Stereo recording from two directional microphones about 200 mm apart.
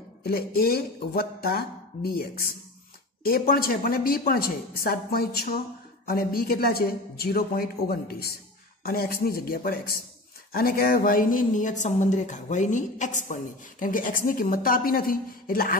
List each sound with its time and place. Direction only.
0.2 s speech: 50° left (ahead or behind)
3.3 s speech: 50° left (ahead or behind)